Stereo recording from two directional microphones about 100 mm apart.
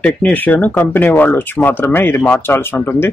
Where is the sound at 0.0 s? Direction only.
15° left (ahead or behind).